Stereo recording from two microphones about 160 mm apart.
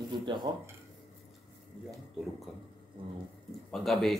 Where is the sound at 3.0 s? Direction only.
30° right (ahead or behind).